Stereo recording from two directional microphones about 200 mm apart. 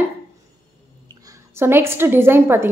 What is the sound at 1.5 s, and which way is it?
A woman's voice, 10° right (ahead or behind).